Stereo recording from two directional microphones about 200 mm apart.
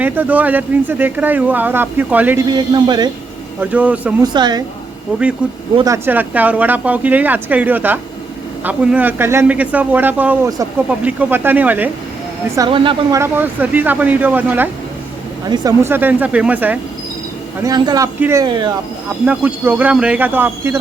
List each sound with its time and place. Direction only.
0.0 s a man's voice: 10° right (ahead or behind)
2.5 s speech: 20° right (ahead or behind)
3.6 s a man's voice: 5° right (ahead or behind)
4.2 s speech: 20° right (ahead or behind)
5.4 s speech: 5° right (ahead or behind)
5.7 s a man's voice: 15° right (ahead or behind)
12.5 s speech: 25° right (ahead or behind)
13.1 s a man's voice: 10° right (ahead or behind)
15.4 s a man's voice: 20° right (ahead or behind)
17.6 s speech: 20° right (ahead or behind)
19.2 s a man's voice: 5° right (ahead or behind)